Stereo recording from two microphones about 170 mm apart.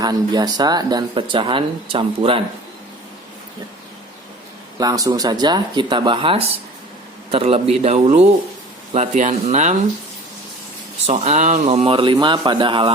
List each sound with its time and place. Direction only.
0.0 s speech: 25° right (ahead or behind)
4.8 s speech: 20° right (ahead or behind); by 9.7 s 45° right (ahead or behind)
11.0 s speech: 40° right (ahead or behind)